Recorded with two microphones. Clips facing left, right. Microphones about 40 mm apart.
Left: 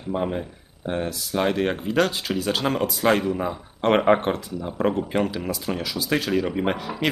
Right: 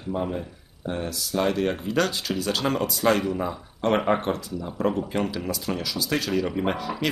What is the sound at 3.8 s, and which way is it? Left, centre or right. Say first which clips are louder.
Speech: left 4 dB; left.